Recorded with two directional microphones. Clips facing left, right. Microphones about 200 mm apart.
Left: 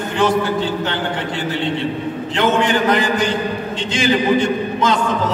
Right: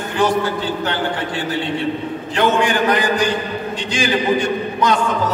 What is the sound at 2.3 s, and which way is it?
A man's voice, 20° left (ahead or behind).